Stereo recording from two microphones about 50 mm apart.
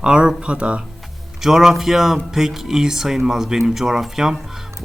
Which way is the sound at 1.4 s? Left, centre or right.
Centre.